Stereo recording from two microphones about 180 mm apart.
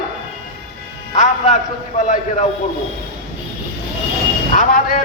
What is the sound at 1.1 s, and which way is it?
Speech, 40° left (ahead or behind).